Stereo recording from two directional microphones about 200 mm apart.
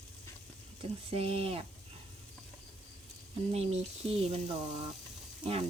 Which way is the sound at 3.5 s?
30° right (ahead or behind).